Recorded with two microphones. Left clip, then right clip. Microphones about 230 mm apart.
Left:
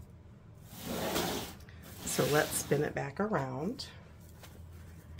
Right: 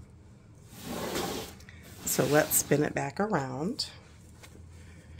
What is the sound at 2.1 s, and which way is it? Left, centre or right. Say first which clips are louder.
Speech: right 4 dB; right.